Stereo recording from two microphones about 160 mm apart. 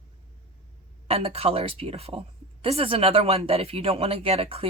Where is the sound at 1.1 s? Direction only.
40° right (ahead or behind).